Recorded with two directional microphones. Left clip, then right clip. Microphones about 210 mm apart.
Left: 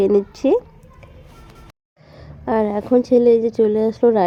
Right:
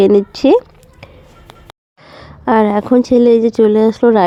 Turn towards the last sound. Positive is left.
turn(degrees=-25)  # may be behind; listen again after turning